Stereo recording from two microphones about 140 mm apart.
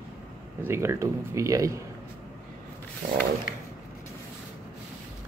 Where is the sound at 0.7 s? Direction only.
20° right (ahead or behind).